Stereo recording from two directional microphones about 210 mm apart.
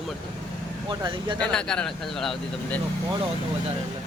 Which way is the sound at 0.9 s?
20° right (ahead or behind).